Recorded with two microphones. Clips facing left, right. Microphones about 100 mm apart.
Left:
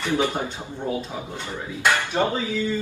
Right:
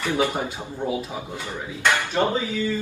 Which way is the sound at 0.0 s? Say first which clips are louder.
Even; 15° right (ahead or behind).